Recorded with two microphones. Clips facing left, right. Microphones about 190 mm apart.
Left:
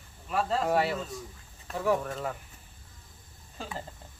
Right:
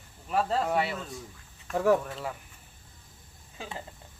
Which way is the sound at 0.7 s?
Centre (ahead or behind).